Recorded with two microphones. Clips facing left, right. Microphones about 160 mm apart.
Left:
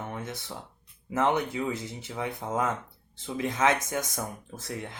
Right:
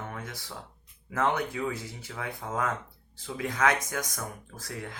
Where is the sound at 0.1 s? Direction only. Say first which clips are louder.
Left 3 dB; 25° left (ahead or behind).